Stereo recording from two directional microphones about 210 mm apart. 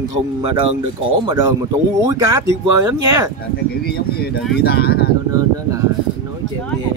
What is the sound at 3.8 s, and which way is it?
Speech, 50° left (ahead or behind).